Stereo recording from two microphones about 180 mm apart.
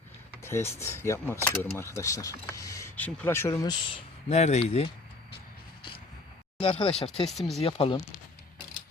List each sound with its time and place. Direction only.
0.4 s speech: 15° left (ahead or behind); by 4.9 s 30° left (ahead or behind)
6.6 s speech: 30° left (ahead or behind)
7.3 s speech: centre (ahead or behind)
7.6 s speech: 30° left (ahead or behind)